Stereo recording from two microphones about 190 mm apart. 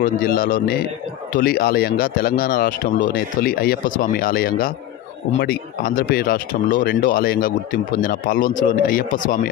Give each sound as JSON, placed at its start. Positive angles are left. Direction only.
{"t": 0.0, "sound": "speech", "side_deg": 50}